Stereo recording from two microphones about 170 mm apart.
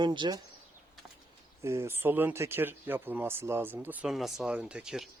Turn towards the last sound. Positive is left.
turn(degrees=-5)  # may be behind; listen again after turning